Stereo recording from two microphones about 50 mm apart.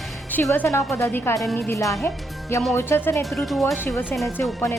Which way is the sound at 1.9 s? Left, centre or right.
Left.